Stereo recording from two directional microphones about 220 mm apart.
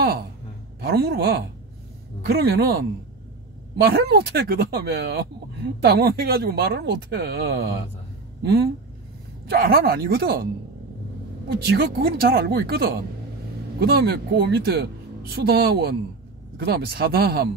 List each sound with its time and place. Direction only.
0.7 s speech: 45° right (ahead or behind)